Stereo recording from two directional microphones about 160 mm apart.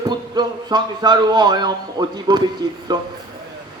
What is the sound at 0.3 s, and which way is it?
A man's voice, 25° right (ahead or behind).